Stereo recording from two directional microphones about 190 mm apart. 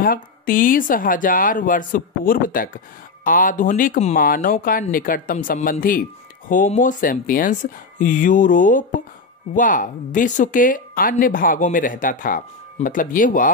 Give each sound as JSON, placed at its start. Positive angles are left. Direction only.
{"t": 0.0, "sound": "speech", "side_deg": 50}